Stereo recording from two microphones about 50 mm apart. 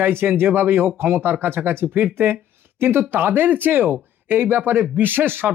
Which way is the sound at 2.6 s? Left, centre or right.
Right.